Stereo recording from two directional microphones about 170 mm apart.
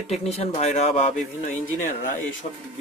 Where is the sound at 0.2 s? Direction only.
40° left (ahead or behind).